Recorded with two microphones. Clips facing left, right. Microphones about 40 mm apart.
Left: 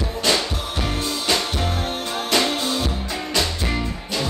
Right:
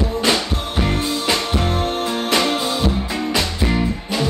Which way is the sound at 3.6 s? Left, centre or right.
Centre.